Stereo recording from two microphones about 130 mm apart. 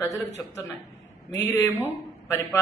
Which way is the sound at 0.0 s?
25° left (ahead or behind).